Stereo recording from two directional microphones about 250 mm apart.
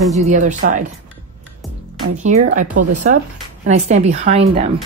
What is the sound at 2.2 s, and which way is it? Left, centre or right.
Speech, right.